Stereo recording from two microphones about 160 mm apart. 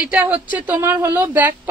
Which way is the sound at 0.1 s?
10° right (ahead or behind).